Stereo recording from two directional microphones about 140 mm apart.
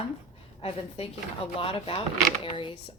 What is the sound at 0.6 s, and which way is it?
Speech, 45° left (ahead or behind).